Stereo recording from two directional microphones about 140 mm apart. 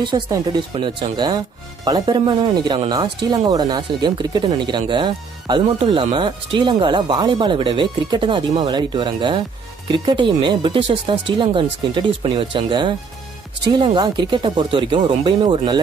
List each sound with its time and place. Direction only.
0.0 s speech: 30° right (ahead or behind)